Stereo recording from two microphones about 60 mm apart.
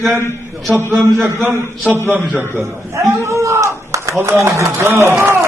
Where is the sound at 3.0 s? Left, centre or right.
Right.